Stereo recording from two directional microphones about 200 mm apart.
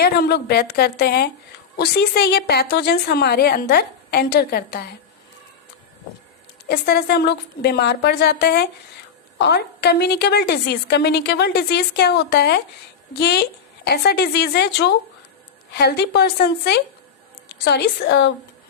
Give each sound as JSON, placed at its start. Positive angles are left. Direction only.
{"t": 0.0, "sound": "a woman's voice", "side_deg": 55}
{"t": 6.7, "sound": "a woman's voice", "side_deg": 50}